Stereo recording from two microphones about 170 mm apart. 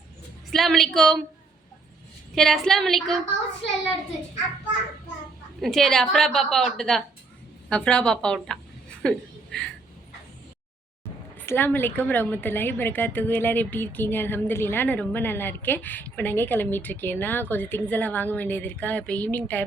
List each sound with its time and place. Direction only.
0.5 s a woman's voice: centre (ahead or behind)
2.3 s a woman's voice: centre (ahead or behind)
5.5 s a woman's voice: centre (ahead or behind)
9.0 s a sound: 5° left (ahead or behind)
11.3 s a woman's voice: 10° left (ahead or behind)